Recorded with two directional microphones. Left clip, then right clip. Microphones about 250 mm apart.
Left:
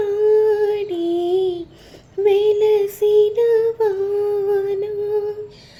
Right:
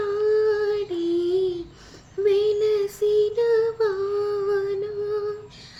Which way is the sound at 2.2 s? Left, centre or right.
Centre.